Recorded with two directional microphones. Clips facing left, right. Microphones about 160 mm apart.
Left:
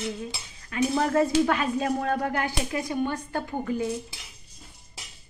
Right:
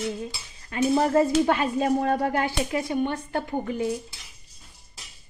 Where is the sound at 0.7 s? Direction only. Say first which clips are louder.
Right 3 dB; 30° right (ahead or behind).